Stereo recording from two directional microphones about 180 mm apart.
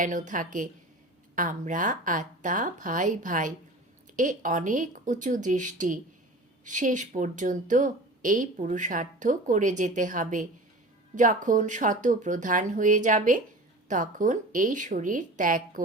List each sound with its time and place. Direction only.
0.0 s speech: 45° right (ahead or behind)